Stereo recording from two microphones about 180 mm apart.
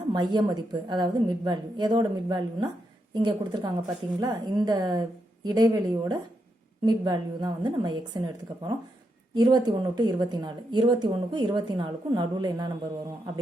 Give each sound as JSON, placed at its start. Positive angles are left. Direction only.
{"t": 0.1, "sound": "speech", "side_deg": -25}
{"t": 9.3, "sound": "speech", "side_deg": -20}